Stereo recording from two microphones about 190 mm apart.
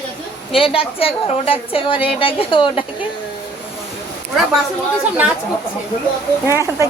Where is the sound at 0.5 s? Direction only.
30° left (ahead or behind).